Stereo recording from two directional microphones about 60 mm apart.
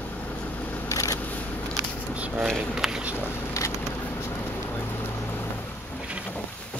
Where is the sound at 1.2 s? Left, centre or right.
Left.